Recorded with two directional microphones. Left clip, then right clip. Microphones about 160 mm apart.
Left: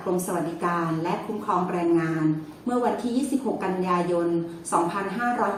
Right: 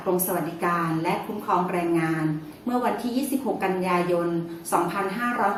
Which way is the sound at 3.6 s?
Centre (ahead or behind).